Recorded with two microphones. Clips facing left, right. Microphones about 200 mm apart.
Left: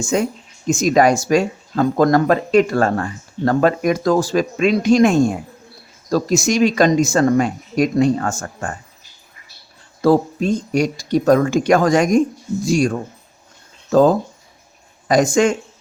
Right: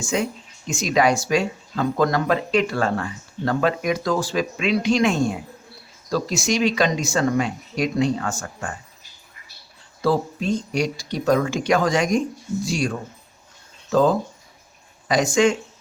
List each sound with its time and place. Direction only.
0.0 s speech: 45° left (ahead or behind)
10.0 s speech: 45° left (ahead or behind)